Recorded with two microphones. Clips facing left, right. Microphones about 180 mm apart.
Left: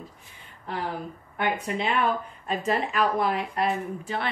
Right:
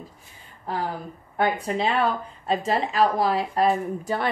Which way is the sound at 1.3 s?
35° right (ahead or behind).